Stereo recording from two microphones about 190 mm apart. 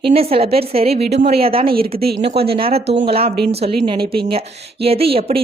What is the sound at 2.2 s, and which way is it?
A woman's voice, 30° right (ahead or behind).